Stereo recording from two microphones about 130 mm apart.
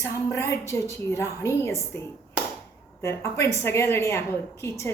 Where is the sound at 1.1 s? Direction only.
20° left (ahead or behind).